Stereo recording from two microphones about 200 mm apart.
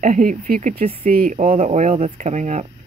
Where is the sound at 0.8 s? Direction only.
30° right (ahead or behind).